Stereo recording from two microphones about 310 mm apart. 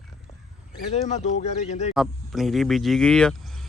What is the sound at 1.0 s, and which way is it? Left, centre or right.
Speech, left.